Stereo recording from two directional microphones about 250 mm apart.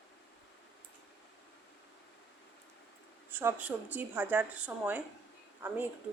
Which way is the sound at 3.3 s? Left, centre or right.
Centre.